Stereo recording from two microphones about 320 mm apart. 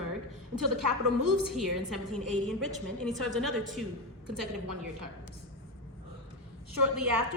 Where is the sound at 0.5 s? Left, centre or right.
Right.